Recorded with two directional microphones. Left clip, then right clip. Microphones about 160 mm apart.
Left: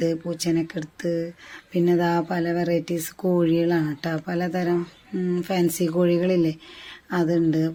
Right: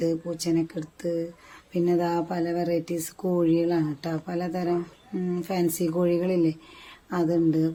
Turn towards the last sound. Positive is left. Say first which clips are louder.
# left 1 dB
turn(degrees=10)  # may be behind; listen again after turning